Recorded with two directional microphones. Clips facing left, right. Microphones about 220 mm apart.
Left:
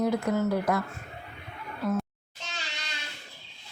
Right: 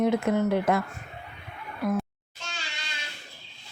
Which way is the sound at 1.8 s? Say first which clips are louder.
Right 2 dB; 15° right (ahead or behind).